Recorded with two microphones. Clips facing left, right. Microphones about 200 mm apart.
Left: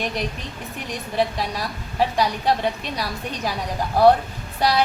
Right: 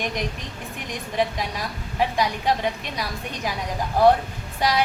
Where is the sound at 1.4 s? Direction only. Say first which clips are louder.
Left 2 dB; 35° left (ahead or behind).